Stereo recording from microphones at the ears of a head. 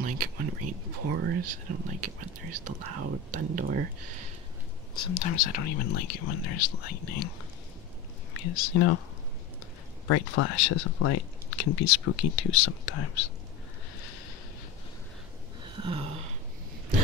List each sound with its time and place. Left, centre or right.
0.0 s speech: right
4.9 s speech: left
10.0 s speech: left